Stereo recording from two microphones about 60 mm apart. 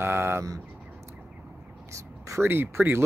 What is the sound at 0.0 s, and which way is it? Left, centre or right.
Bird, right.